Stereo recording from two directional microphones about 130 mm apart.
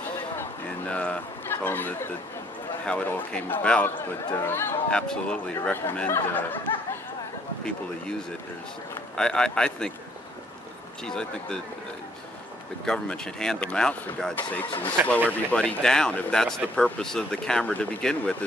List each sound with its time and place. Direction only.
0.4 s a sound: 10° left (ahead or behind)
2.9 s speech: 10° left (ahead or behind)
4.9 s speech: 5° left (ahead or behind)
9.1 s speech: 5° left (ahead or behind)
11.1 s speech: 5° left (ahead or behind)
12.8 s speech: 5° left (ahead or behind)